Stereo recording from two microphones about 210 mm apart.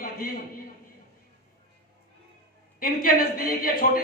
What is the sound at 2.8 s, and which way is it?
A man's voice, 45° left (ahead or behind).